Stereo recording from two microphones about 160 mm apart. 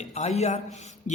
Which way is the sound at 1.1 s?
45° left (ahead or behind).